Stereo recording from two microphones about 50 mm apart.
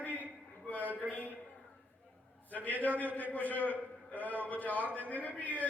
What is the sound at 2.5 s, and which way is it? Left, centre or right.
A man's voice, left.